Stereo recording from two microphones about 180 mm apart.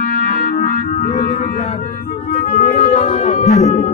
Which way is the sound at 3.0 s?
40° left (ahead or behind).